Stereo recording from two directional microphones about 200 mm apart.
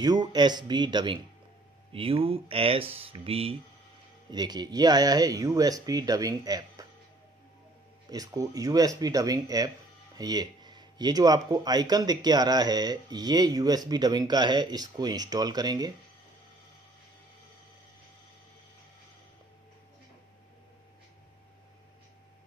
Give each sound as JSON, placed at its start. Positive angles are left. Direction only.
{"t": 0.0, "sound": "speech", "side_deg": -20}
{"t": 8.1, "sound": "speech", "side_deg": -15}